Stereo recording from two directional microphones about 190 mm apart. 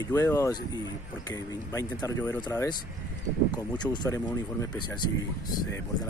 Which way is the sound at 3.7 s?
20° left (ahead or behind).